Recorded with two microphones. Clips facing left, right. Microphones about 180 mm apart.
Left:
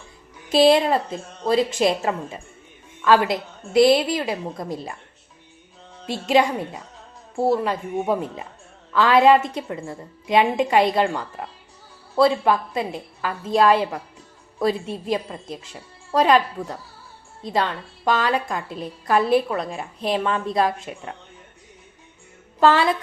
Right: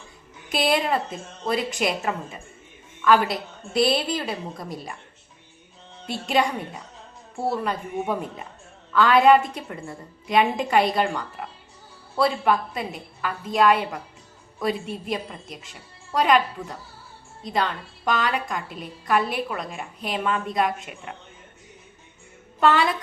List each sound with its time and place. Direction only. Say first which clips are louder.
0.5 s a woman's voice: left 7 dB; 30° left (ahead or behind)
6.1 s a woman's voice: left 4 dB; 25° left (ahead or behind)
7.5 s a woman's voice: left 4 dB; 25° left (ahead or behind)
12.2 s a woman's voice: left 4 dB; 25° left (ahead or behind)
17.4 s a woman's voice: left 2 dB; 25° left (ahead or behind)
22.6 s a woman's voice: left 3 dB; 25° left (ahead or behind)